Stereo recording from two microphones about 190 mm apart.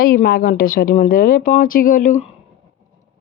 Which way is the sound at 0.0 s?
50° left (ahead or behind).